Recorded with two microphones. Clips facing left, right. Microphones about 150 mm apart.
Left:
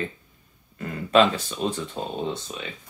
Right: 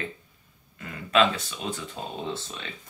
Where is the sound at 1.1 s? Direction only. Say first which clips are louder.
Left 4 dB; 35° left (ahead or behind).